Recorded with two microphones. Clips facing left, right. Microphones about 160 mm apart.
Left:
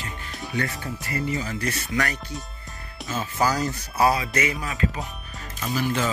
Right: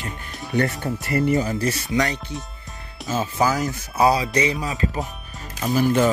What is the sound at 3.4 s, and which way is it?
Speech, 15° right (ahead or behind).